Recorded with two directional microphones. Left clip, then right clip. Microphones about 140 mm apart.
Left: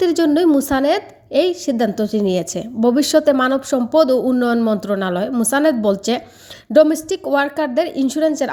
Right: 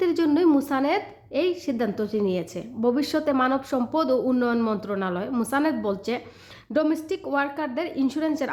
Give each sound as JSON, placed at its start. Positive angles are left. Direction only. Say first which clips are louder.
{"t": 0.0, "sound": "a woman's voice", "louder": "left 6 dB", "side_deg": 45}